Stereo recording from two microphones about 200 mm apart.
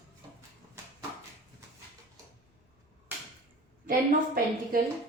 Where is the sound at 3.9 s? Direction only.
45° right (ahead or behind).